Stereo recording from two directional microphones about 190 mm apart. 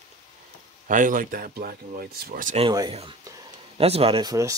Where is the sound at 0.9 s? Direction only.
45° right (ahead or behind).